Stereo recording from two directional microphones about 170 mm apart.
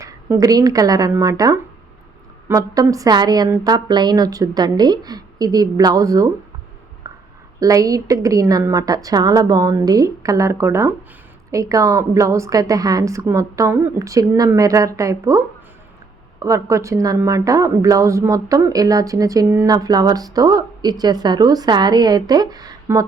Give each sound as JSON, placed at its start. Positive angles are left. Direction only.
{"t": 0.0, "sound": "a woman's voice", "side_deg": -20}
{"t": 7.1, "sound": "a sound", "side_deg": -20}
{"t": 7.6, "sound": "a woman's voice", "side_deg": -20}